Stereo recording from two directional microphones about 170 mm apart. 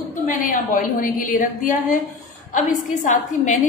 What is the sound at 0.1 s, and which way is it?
A woman's voice, 50° left (ahead or behind).